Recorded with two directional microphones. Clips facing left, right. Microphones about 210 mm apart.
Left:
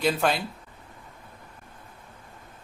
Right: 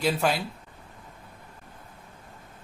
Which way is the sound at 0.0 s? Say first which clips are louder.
Left 1 dB; centre (ahead or behind).